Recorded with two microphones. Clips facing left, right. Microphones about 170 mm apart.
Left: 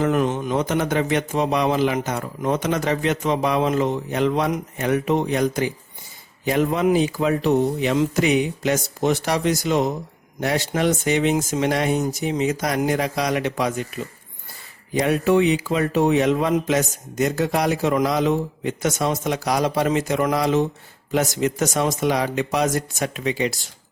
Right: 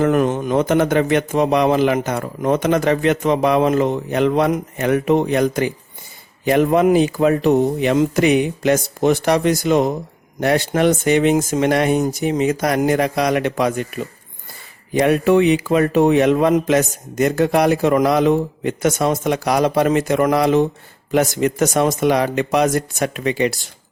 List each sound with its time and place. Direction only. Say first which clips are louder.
0.0 s a man's voice: right 4 dB; 55° right (ahead or behind)